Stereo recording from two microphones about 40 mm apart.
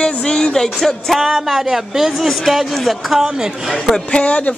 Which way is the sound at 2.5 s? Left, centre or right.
Centre.